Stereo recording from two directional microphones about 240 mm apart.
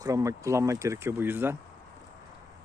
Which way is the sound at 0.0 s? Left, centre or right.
Centre.